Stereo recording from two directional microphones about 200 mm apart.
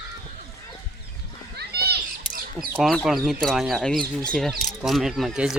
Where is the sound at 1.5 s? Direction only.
55° right (ahead or behind).